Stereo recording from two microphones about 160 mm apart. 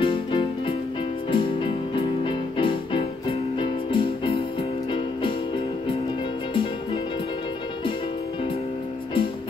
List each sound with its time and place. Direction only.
0.0 s music: 35° left (ahead or behind)
6.5 s music: 30° left (ahead or behind)